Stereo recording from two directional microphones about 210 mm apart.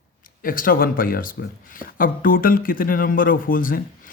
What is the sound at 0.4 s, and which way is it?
Speech, 40° left (ahead or behind).